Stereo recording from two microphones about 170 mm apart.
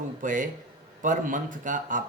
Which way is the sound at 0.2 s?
50° right (ahead or behind).